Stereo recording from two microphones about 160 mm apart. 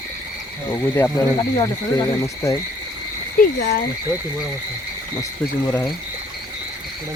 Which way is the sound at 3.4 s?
65° left (ahead or behind).